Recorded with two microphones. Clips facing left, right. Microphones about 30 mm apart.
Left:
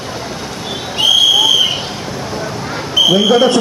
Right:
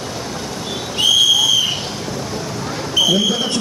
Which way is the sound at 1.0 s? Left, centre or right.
Left.